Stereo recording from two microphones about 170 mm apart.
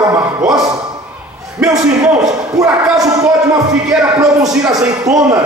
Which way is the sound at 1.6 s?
5° right (ahead or behind).